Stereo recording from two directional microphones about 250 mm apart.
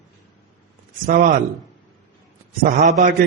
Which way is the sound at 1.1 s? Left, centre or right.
Right.